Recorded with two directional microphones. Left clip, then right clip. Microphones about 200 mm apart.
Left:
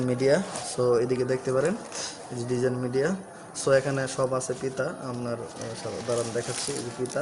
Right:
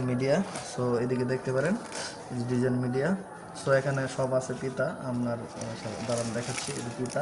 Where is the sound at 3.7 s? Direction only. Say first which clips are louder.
Left 3 dB; 45° left (ahead or behind).